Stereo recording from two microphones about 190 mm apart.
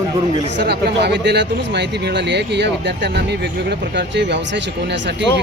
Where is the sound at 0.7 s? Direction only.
60° right (ahead or behind).